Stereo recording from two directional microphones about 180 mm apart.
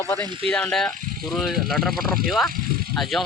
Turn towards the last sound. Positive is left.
turn(degrees=0)  # may be behind; listen again after turning